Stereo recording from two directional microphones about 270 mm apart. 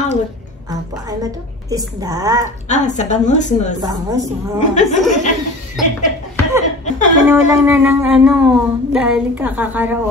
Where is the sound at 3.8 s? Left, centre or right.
Centre.